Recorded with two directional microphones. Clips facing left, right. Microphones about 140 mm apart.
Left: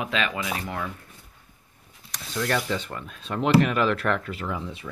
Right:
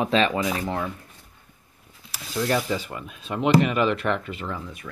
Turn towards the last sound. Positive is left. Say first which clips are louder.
# even
turn(degrees=0)  # may be behind; listen again after turning